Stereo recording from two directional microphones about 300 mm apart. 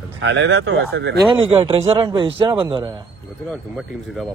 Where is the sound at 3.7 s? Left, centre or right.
Centre.